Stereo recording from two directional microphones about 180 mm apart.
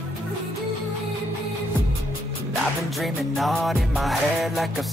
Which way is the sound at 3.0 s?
Centre (ahead or behind).